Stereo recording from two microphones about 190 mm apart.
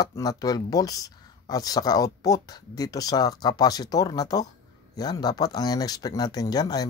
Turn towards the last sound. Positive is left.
turn(degrees=20)  # may be behind; listen again after turning